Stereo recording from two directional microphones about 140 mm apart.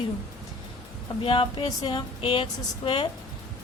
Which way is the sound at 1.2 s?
40° left (ahead or behind).